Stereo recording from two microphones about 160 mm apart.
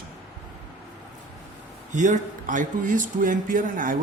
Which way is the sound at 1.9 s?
50° right (ahead or behind).